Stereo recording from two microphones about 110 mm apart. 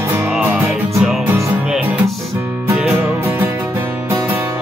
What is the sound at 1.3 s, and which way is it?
Music, 25° right (ahead or behind).